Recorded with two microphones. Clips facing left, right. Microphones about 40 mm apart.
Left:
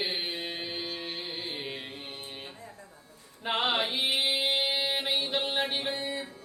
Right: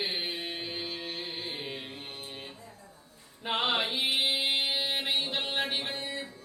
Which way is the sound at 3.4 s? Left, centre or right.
Centre.